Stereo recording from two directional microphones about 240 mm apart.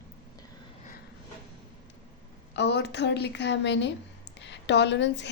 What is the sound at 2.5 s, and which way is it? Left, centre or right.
A woman's voice, left.